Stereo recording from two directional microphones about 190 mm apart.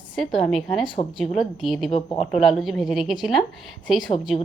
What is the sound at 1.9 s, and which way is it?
Speech, 30° left (ahead or behind).